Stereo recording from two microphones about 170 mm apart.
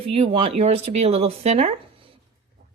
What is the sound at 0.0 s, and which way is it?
Speech, 35° right (ahead or behind).